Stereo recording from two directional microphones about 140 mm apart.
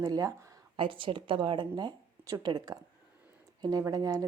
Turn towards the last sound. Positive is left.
turn(degrees=-25)  # may be behind; listen again after turning